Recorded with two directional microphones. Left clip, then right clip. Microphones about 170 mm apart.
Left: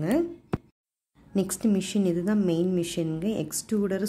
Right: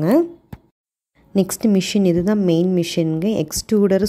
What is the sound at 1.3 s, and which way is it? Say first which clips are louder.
Speech: right 9 dB; 35° right (ahead or behind).